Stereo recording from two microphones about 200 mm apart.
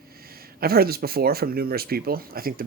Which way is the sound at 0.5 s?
50° right (ahead or behind).